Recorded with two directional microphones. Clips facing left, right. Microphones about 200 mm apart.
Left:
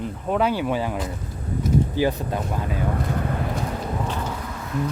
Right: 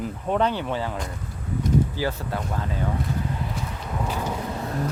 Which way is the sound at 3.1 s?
60° left (ahead or behind).